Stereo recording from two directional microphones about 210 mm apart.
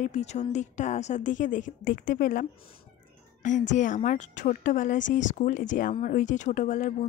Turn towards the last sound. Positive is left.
turn(degrees=35)  # may be behind; listen again after turning